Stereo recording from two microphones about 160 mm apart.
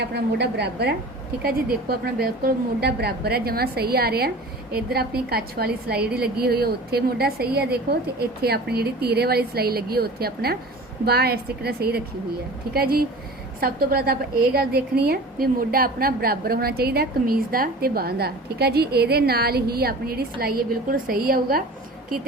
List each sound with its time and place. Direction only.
0.0 s a woman's voice: 90° right
1.4 s a woman's voice: 75° right (ahead or behind)
12.7 s a woman's voice: 70° right (ahead or behind)